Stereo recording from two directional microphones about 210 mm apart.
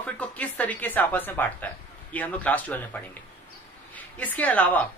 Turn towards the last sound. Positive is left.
turn(degrees=5)  # may be behind; listen again after turning